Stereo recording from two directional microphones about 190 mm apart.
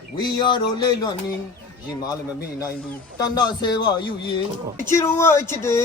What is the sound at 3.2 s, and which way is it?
Speech, 20° left (ahead or behind).